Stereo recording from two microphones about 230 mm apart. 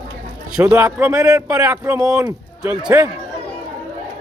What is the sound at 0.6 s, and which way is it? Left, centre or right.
Speech, centre.